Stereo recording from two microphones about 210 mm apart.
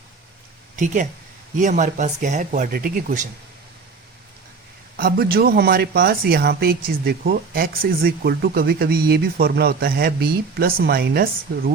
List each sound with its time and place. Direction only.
1.5 s speech: 35° right (ahead or behind)
4.9 s speech: 45° right (ahead or behind)